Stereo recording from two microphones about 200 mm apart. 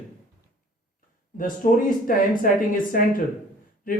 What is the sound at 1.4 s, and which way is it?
Speech, 45° left (ahead or behind).